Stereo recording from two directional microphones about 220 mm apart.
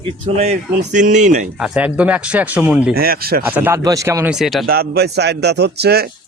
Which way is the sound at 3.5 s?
10° right (ahead or behind).